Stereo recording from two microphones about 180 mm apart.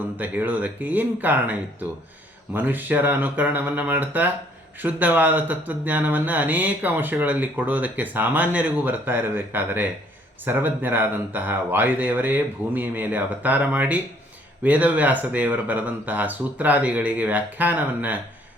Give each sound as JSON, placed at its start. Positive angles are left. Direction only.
{"t": 0.2, "sound": "speech", "side_deg": -10}